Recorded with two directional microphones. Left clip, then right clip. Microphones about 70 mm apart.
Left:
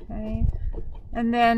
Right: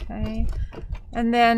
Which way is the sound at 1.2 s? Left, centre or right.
Centre.